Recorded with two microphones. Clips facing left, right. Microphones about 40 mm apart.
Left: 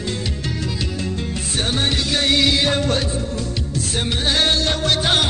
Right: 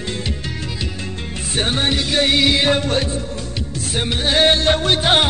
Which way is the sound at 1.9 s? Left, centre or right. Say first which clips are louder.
Right 2 dB; centre.